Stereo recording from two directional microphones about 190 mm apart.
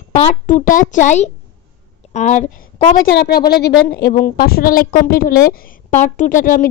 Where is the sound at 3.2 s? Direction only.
55° left (ahead or behind).